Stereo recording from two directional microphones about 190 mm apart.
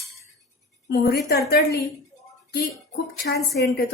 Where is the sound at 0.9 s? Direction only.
60° left (ahead or behind).